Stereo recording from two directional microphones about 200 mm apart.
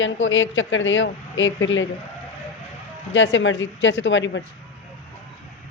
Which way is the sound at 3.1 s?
70° left (ahead or behind).